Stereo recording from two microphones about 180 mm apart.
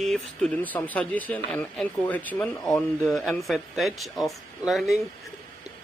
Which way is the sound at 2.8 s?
15° left (ahead or behind).